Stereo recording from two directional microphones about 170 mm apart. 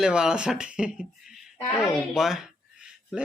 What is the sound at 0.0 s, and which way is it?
Speech, 5° right (ahead or behind).